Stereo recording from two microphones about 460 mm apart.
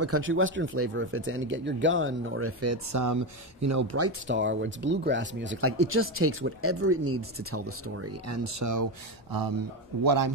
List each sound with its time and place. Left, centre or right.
0.0 s speech: right
10.0 s a man's voice: right